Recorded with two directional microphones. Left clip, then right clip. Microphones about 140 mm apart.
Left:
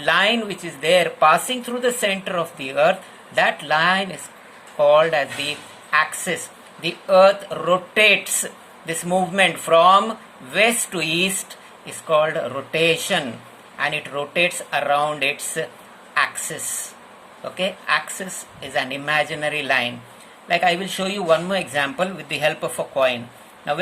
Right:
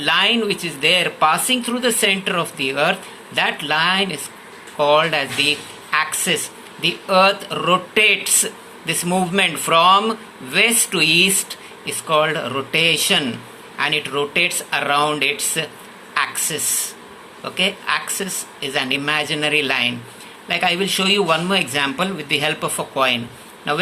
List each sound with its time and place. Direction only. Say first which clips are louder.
0.0 s speech: right 1 dB; 40° left (ahead or behind)